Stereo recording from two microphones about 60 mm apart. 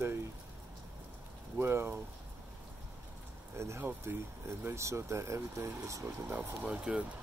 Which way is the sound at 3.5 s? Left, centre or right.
Right.